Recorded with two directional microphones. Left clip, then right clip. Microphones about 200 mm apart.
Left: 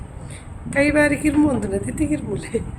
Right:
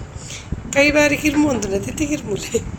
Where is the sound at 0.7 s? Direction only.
10° right (ahead or behind).